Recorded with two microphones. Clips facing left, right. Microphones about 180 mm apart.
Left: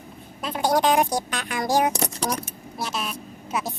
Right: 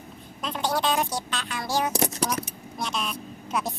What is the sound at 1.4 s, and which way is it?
Speech, 55° left (ahead or behind).